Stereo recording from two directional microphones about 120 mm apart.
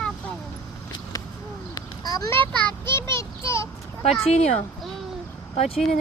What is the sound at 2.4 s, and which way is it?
Speech, 40° right (ahead or behind).